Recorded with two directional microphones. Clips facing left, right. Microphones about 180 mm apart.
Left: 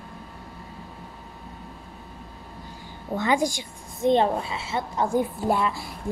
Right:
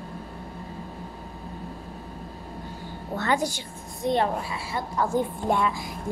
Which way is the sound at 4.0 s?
20° left (ahead or behind).